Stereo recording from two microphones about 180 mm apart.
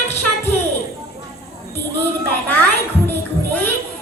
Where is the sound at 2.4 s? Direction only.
10° left (ahead or behind).